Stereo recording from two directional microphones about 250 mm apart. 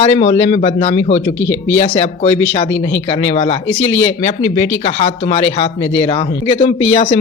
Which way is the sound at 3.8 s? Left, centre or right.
Left.